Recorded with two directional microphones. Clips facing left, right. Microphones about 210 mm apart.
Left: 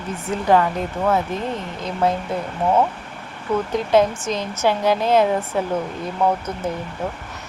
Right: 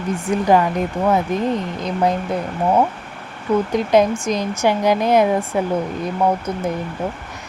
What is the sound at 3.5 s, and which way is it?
Speech, 10° right (ahead or behind).